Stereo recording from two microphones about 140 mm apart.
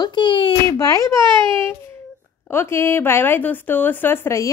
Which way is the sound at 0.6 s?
20° left (ahead or behind).